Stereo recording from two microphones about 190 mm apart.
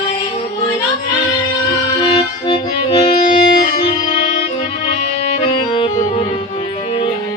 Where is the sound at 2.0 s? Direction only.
25° left (ahead or behind).